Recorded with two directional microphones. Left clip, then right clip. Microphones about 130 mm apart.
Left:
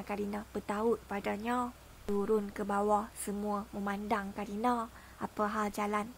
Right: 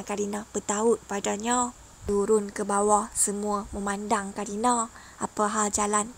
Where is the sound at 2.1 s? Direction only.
50° right (ahead or behind).